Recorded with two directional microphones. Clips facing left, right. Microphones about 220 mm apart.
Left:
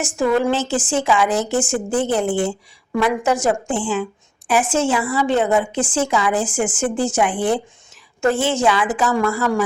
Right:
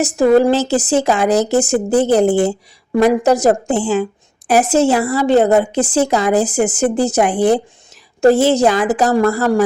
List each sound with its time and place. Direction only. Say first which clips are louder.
0.0 s speech: right 7 dB; 40° right (ahead or behind)